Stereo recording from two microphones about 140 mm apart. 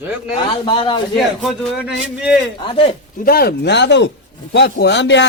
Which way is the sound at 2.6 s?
35° left (ahead or behind).